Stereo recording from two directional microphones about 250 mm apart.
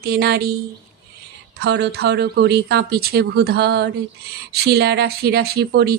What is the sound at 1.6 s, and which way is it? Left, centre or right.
A woman's voice, right.